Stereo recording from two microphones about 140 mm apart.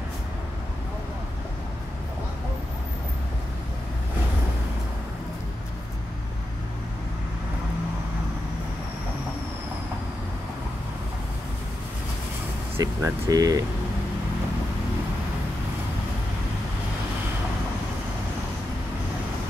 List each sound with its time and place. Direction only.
12.7 s speech: 25° right (ahead or behind)